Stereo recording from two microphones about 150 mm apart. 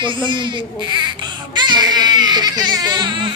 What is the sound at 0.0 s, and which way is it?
A woman's voice, 30° right (ahead or behind).